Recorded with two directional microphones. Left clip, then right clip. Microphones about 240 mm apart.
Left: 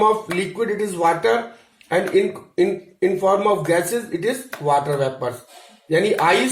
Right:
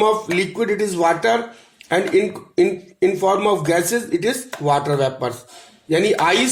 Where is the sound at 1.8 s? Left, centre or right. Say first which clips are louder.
Right 1 dB; right.